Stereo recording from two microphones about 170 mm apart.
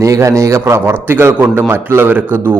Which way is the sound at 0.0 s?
20° right (ahead or behind).